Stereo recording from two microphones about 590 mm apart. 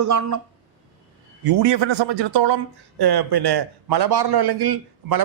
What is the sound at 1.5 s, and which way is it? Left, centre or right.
A man's voice, right.